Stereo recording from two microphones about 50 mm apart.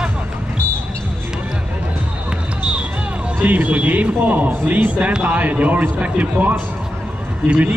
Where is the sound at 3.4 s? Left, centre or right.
Right.